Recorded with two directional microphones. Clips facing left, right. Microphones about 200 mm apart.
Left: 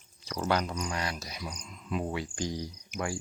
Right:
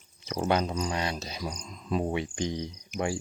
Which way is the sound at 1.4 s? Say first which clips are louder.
Right 5 dB; 35° right (ahead or behind).